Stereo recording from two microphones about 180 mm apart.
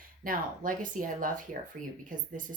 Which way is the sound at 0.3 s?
50° right (ahead or behind).